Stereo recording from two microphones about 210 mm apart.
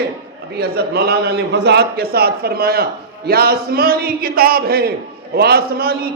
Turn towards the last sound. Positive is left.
turn(degrees=-45)  # may be behind; listen again after turning